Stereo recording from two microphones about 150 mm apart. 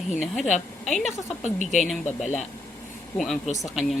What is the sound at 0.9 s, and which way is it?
Speech, centre (ahead or behind).